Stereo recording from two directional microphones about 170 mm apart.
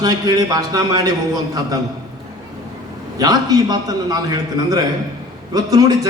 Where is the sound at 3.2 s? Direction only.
25° right (ahead or behind).